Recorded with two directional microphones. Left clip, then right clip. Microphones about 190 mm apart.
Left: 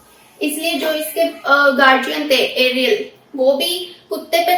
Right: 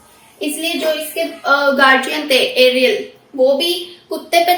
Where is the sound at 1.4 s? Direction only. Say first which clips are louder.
Right 1 dB; 25° right (ahead or behind).